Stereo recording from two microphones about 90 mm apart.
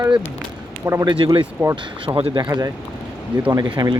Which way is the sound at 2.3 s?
45° right (ahead or behind).